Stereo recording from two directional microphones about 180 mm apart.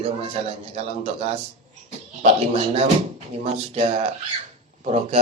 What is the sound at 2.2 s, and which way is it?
Speech, 35° right (ahead or behind).